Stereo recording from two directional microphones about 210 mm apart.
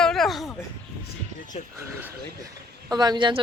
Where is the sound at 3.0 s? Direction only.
20° right (ahead or behind).